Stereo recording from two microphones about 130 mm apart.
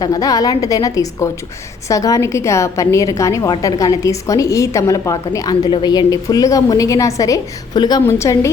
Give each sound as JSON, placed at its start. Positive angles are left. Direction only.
{"t": 0.0, "sound": "a woman's voice", "side_deg": 30}
{"t": 8.0, "sound": "a woman's voice", "side_deg": 20}